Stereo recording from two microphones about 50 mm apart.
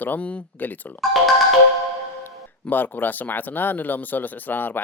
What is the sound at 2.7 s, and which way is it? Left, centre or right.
Speech, left.